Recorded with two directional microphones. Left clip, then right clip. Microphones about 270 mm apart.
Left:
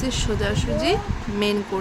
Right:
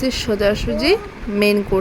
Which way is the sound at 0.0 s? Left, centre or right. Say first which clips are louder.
Right 7 dB; centre.